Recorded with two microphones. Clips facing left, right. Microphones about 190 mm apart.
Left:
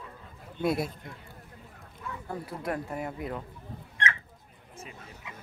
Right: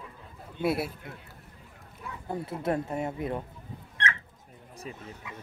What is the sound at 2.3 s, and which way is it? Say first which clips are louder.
Speech: right 4 dB; 25° right (ahead or behind).